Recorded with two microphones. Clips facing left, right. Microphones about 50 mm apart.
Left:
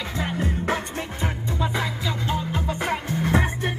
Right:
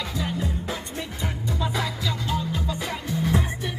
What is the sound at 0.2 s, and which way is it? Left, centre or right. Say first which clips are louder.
Music: left 4 dB; left.